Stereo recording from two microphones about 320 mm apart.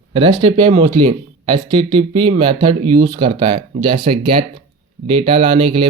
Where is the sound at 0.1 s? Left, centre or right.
Centre.